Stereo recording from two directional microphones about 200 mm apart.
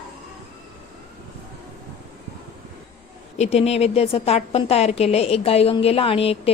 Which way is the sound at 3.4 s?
30° left (ahead or behind).